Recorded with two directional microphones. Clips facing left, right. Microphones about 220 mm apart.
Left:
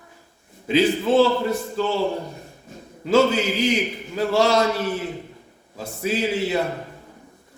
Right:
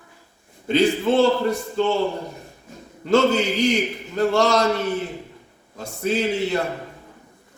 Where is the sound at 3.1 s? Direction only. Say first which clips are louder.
Even; 5° left (ahead or behind).